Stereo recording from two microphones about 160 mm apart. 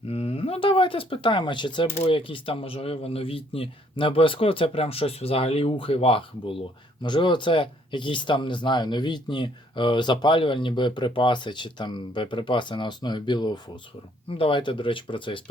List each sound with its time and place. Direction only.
0.1 s speech: 40° left (ahead or behind)